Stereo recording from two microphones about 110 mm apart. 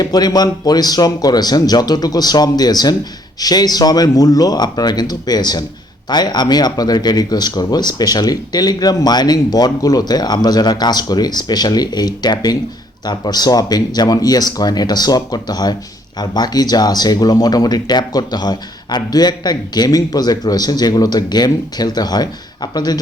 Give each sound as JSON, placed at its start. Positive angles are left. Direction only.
{"t": 0.0, "sound": "speech", "side_deg": 40}